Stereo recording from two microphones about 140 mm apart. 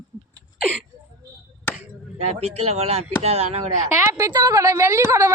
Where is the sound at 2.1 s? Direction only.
50° right (ahead or behind).